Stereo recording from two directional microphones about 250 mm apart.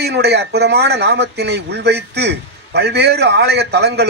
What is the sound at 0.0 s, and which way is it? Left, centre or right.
A man's voice, right.